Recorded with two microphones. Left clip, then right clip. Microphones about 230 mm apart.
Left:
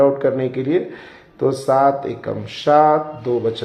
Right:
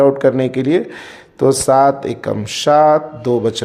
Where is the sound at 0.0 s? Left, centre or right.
Right.